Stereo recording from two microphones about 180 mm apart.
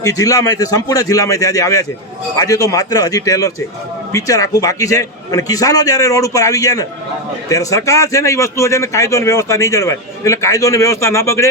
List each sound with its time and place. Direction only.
0.0 s a man's voice: 20° left (ahead or behind)